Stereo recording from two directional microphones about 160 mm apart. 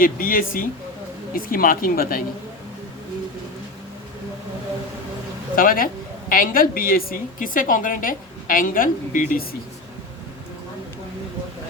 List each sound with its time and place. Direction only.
0.0 s speech: 60° left (ahead or behind)
5.5 s speech: 60° left (ahead or behind)